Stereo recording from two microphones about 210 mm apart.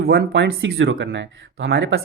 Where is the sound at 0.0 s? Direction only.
50° right (ahead or behind).